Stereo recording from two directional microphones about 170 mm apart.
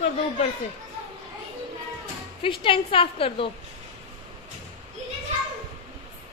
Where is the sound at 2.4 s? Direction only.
30° left (ahead or behind).